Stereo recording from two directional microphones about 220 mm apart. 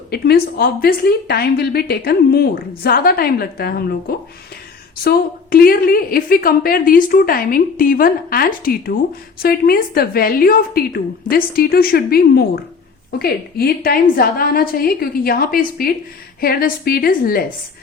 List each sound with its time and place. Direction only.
0.1 s a woman's voice: 45° left (ahead or behind)
5.0 s a woman's voice: 40° left (ahead or behind)